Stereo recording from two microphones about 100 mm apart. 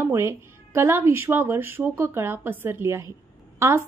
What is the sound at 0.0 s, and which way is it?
A woman's voice, 25° right (ahead or behind).